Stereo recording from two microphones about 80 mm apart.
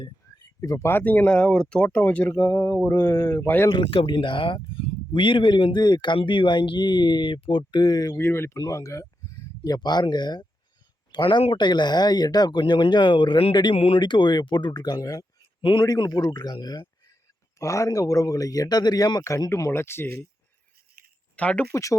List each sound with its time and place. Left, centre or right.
0.6 s speech: left
0.9 s speech: left
3.7 s speech: left
8.1 s speech: left
8.5 s speech: left
9.6 s speech: left
11.1 s speech: left
15.6 s a man's voice: left
16.0 s speech: left
17.6 s speech: left
19.7 s speech: left
21.3 s speech: centre
21.7 s speech: left